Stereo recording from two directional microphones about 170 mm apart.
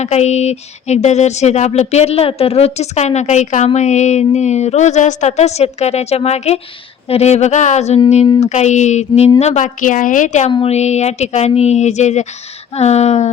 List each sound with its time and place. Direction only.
0.0 s a woman's voice: 40° left (ahead or behind)